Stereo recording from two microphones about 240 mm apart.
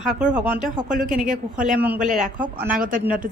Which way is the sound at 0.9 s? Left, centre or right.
Right.